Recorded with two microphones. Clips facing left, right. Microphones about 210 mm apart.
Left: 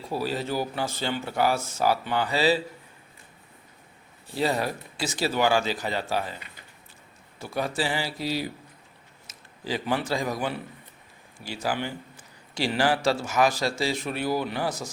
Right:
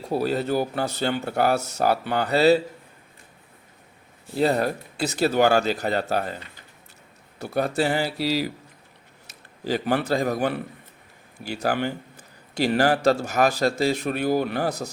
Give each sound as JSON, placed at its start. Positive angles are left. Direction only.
{"t": 0.0, "sound": "speech", "side_deg": -55}
{"t": 4.4, "sound": "speech", "side_deg": -50}
{"t": 8.2, "sound": "a man's voice", "side_deg": -90}
{"t": 9.6, "sound": "speech", "side_deg": -45}
{"t": 11.6, "sound": "speech", "side_deg": -45}